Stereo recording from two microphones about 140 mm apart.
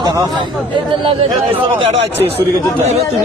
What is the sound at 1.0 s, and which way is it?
Speech, 40° right (ahead or behind).